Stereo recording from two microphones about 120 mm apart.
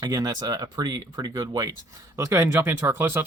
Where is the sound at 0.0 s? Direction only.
30° right (ahead or behind).